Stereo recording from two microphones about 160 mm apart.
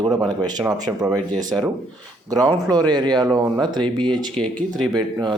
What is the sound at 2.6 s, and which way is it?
Speech, 25° right (ahead or behind).